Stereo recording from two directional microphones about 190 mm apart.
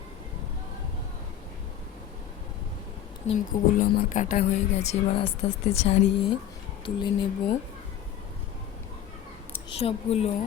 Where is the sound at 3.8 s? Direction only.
45° left (ahead or behind).